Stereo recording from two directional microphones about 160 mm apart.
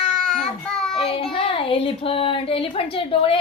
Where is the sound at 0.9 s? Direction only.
35° left (ahead or behind).